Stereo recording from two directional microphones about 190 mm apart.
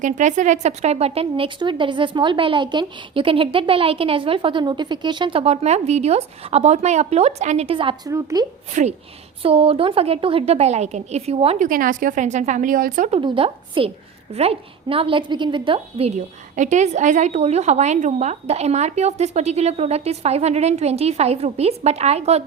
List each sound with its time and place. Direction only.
0.0 s speech: 40° right (ahead or behind); by 8.4 s 20° right (ahead or behind)
8.7 s a woman's voice: 35° right (ahead or behind)
11.7 s a woman's voice: 45° right (ahead or behind)
13.1 s a woman's voice: 30° right (ahead or behind)